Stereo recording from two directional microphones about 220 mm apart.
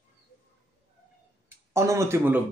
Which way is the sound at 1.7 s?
15° right (ahead or behind).